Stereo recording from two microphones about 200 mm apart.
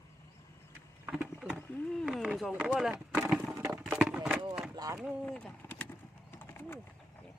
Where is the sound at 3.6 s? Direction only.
15° right (ahead or behind).